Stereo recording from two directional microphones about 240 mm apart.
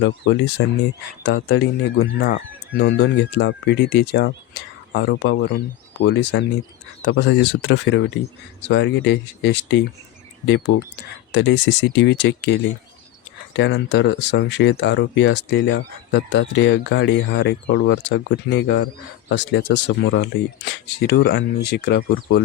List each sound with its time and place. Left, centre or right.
0.0 s speech: left